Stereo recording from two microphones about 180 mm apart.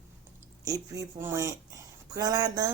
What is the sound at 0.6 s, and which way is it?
A woman's voice, 20° right (ahead or behind).